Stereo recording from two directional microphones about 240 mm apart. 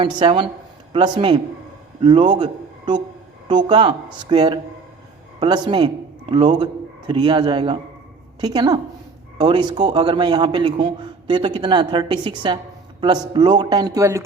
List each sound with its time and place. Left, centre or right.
0.0 s a man's voice: right